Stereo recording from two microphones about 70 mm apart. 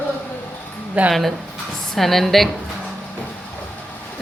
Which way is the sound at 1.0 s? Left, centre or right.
Right.